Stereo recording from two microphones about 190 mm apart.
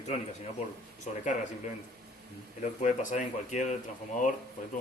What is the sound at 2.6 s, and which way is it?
A man's voice, 40° left (ahead or behind).